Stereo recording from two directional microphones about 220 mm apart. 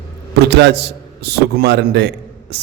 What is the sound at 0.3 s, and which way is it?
A man's voice, 50° right (ahead or behind).